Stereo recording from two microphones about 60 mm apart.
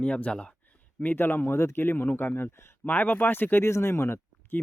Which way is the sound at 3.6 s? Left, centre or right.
Left.